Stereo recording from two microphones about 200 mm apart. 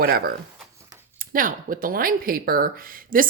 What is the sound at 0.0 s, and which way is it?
Speech, 50° right (ahead or behind).